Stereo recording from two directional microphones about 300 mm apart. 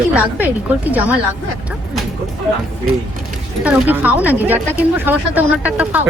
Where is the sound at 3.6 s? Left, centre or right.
Centre.